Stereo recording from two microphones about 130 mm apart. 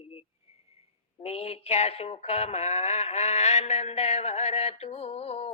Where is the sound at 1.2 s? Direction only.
50° left (ahead or behind).